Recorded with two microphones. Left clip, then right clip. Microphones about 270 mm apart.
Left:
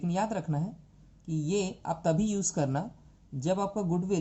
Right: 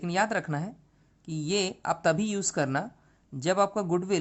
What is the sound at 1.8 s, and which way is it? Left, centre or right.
Speech, right.